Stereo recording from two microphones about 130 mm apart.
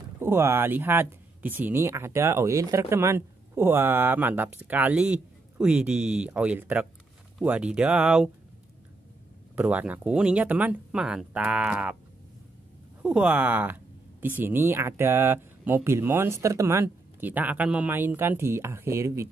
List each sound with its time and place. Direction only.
0.2 s speech: 20° right (ahead or behind)
9.6 s speech: 10° right (ahead or behind)
13.0 s speech: 10° right (ahead or behind)